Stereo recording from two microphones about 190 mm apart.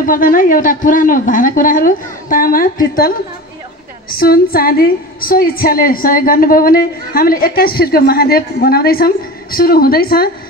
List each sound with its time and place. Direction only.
0.0 s a woman's voice: 45° left (ahead or behind)